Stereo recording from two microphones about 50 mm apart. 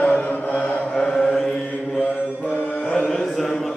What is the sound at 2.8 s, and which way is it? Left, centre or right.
Music, centre.